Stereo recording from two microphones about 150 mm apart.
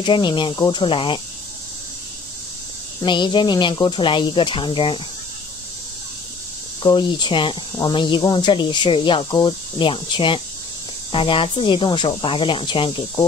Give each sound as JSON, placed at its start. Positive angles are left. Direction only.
{"t": 0.0, "sound": "speech", "side_deg": 30}
{"t": 3.0, "sound": "speech", "side_deg": 30}
{"t": 6.8, "sound": "speech", "side_deg": 30}